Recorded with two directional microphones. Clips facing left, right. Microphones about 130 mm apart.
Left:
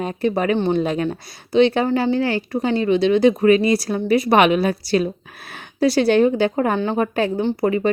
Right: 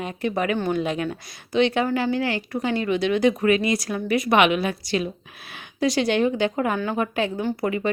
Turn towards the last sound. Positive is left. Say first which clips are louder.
# left 5 dB
turn(degrees=35)  # may be behind; listen again after turning